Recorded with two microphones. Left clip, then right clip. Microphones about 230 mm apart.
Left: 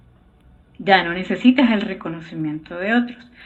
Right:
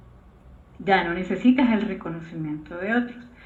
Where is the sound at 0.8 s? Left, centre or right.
Left.